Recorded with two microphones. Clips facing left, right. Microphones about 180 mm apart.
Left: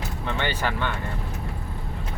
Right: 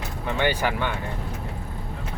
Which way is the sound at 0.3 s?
10° right (ahead or behind).